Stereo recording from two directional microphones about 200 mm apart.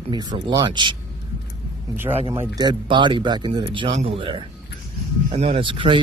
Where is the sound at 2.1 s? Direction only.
30° right (ahead or behind).